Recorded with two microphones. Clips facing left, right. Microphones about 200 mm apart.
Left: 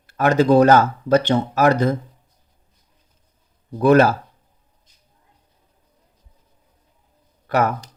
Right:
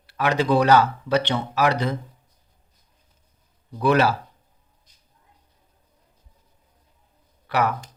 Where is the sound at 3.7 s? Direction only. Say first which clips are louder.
Left 6 dB; 45° left (ahead or behind).